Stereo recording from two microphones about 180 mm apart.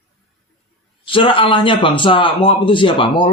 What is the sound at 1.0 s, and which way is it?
A man's voice, 30° left (ahead or behind).